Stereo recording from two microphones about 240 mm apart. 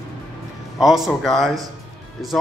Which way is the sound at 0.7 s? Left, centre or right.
Centre.